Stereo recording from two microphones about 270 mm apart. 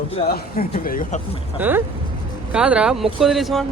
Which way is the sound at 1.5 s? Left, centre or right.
Centre.